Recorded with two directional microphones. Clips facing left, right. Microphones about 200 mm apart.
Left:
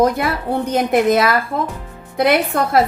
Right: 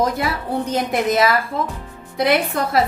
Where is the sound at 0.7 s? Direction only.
55° left (ahead or behind).